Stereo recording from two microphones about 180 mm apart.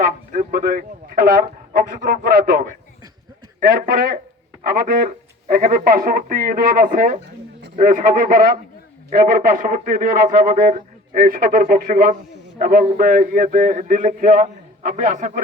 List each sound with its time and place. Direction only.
0.0 s a man's voice: 45° right (ahead or behind)